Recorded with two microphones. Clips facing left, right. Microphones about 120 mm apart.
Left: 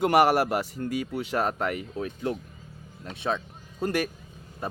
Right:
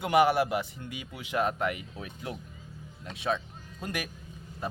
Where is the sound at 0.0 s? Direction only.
45° left (ahead or behind).